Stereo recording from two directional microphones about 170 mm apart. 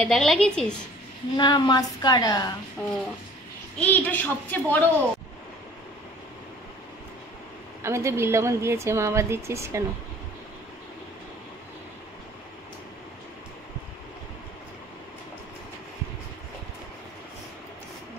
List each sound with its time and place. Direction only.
0.0 s a woman's voice: centre (ahead or behind)
1.3 s a woman's voice: 25° left (ahead or behind)
2.8 s a woman's voice: 5° left (ahead or behind)
7.8 s a woman's voice: 15° right (ahead or behind)